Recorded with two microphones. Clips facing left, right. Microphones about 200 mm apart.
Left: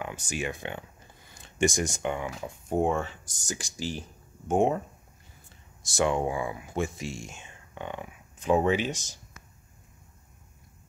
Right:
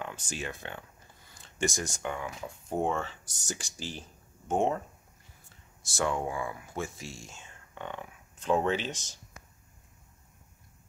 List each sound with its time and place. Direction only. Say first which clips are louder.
0.0 s speech: left 4 dB; 10° left (ahead or behind)
5.8 s speech: left 5 dB; 15° left (ahead or behind)